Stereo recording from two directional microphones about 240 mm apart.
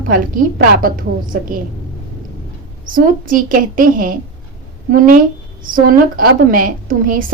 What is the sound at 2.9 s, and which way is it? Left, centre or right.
A woman's voice, right.